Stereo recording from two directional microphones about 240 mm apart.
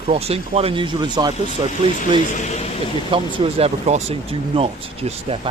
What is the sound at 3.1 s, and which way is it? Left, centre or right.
Speech, right.